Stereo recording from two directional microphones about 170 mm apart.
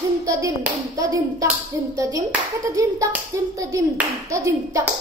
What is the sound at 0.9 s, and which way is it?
Clapping, 20° right (ahead or behind).